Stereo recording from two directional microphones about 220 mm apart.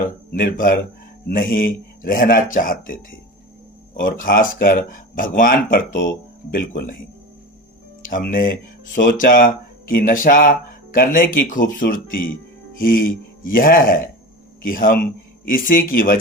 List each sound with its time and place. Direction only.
0.3 s speech: 45° left (ahead or behind)
4.0 s speech: 40° left (ahead or behind)
8.1 s speech: 40° left (ahead or behind)